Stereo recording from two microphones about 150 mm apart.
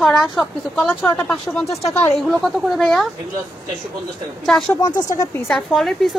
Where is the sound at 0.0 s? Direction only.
Centre (ahead or behind).